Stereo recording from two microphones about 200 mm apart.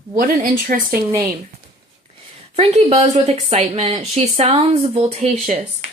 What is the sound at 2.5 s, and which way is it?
Speech, 30° right (ahead or behind).